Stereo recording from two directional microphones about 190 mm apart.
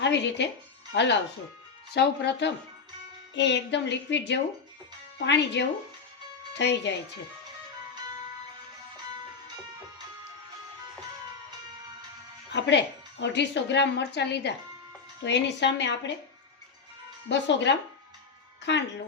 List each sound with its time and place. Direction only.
0.0 s a woman's voice: 70° left (ahead or behind)
12.5 s a woman's voice: 65° left (ahead or behind)
17.2 s a woman's voice: 70° left (ahead or behind)